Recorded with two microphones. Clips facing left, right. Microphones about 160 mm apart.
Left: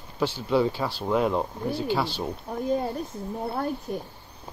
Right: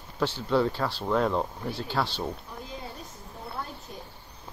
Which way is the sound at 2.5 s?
50° left (ahead or behind).